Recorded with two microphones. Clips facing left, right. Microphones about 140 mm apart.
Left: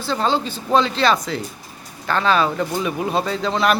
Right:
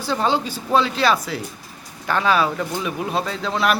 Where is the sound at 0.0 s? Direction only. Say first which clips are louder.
Even; 15° right (ahead or behind).